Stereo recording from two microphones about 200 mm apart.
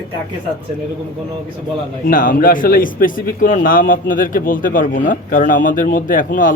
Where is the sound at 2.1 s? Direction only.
45° left (ahead or behind).